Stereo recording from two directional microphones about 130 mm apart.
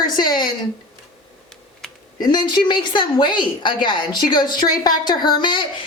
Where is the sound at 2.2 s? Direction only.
35° left (ahead or behind).